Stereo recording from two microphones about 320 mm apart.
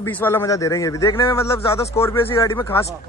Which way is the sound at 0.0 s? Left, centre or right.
Centre.